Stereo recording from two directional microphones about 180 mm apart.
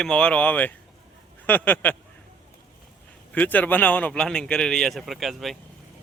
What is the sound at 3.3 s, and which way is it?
A man's voice, 10° left (ahead or behind).